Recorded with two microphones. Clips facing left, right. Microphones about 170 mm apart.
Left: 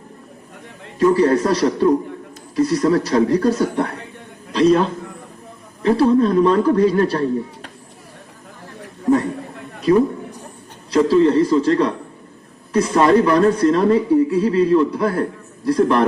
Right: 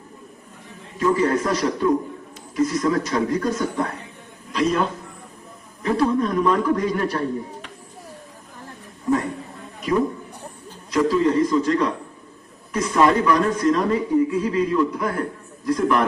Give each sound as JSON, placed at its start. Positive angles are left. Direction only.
{"t": 0.9, "sound": "speech", "side_deg": 35}
{"t": 10.9, "sound": "speech", "side_deg": 30}